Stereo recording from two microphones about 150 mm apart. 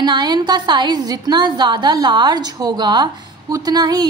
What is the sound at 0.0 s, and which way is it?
A woman's voice, 30° right (ahead or behind).